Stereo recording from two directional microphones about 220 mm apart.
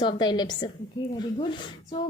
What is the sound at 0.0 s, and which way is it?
A woman's voice, 20° left (ahead or behind).